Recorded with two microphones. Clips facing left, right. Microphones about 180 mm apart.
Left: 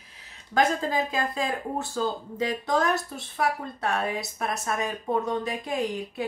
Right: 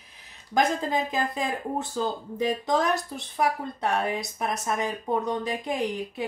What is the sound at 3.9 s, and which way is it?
A woman's voice, 20° right (ahead or behind).